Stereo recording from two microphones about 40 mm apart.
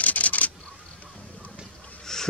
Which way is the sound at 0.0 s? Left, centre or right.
Left.